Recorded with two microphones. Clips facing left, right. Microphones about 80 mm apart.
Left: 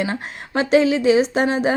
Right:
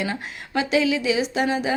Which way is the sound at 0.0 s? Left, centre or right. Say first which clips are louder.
Left 3 dB; left.